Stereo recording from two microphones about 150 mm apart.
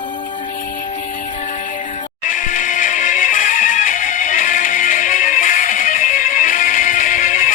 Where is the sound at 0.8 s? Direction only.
55° left (ahead or behind).